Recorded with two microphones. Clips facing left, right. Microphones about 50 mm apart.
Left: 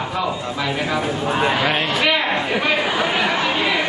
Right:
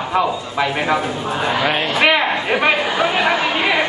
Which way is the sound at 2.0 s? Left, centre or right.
Right.